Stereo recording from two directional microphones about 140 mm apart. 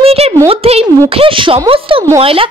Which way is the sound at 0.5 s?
45° right (ahead or behind).